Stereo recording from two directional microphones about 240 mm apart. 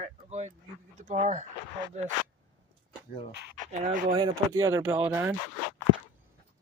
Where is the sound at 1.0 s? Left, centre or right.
Right.